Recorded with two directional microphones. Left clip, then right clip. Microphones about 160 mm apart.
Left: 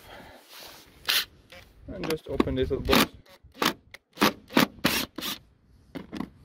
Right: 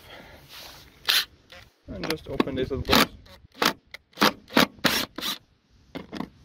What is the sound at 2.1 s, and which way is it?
Speech, 10° left (ahead or behind).